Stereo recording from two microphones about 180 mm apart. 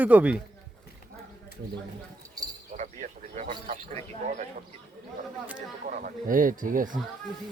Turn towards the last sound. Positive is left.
turn(degrees=-50)  # may be behind; listen again after turning